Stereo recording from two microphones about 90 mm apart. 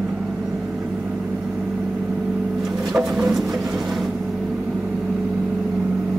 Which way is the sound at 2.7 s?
5° right (ahead or behind).